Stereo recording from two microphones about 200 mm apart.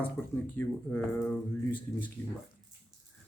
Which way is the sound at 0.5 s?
10° left (ahead or behind).